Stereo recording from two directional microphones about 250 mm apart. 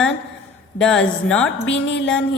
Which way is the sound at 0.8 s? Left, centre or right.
Centre.